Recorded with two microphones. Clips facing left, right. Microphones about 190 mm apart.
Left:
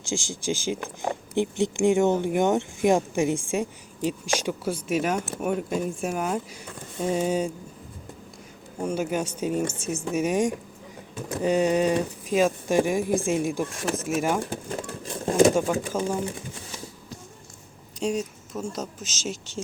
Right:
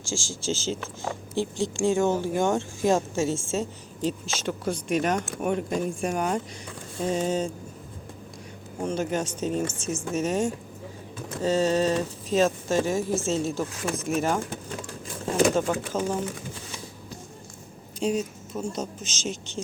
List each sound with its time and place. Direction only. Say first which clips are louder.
0.0 s speech: left 2 dB; 20° left (ahead or behind)
8.8 s speech: left 1 dB; 10° left (ahead or behind)
15.5 s speech: left 1 dB; 10° left (ahead or behind)
18.0 s speech: right 1 dB; centre (ahead or behind)
18.9 s speech: right 1 dB; 45° left (ahead or behind)